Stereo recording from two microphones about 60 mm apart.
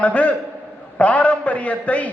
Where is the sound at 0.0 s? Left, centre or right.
Left.